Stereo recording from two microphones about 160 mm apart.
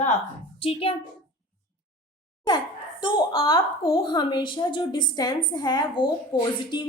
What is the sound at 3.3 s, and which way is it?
A woman's voice, 30° left (ahead or behind).